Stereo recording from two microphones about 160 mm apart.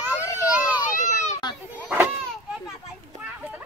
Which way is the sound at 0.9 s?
50° left (ahead or behind).